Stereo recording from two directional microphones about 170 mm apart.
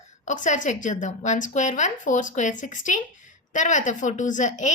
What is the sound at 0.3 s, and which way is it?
A woman's voice, 45° left (ahead or behind).